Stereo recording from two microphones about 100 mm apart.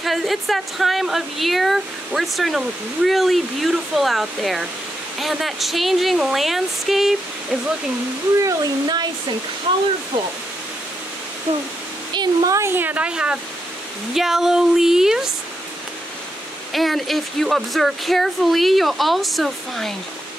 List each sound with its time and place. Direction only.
0.0 s speech: centre (ahead or behind)
8.4 s speech: 40° right (ahead or behind)
12.1 s speech: 45° right (ahead or behind)
12.5 s speech: 25° right (ahead or behind); by 15.3 s 5° right (ahead or behind)
16.7 s speech: centre (ahead or behind)